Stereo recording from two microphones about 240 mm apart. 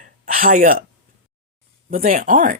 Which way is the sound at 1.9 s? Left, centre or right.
Right.